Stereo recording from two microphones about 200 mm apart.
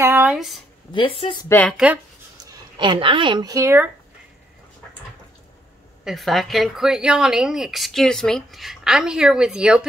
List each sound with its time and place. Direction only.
0.0 s speech: 10° right (ahead or behind)
0.9 s a woman's voice: 25° left (ahead or behind)
1.5 s speech: 5° left (ahead or behind)
2.5 s speech: 25° right (ahead or behind)
6.0 s speech: centre (ahead or behind)